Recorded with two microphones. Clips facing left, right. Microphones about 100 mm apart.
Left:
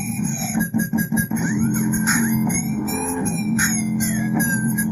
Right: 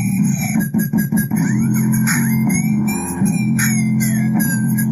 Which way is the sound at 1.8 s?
20° left (ahead or behind).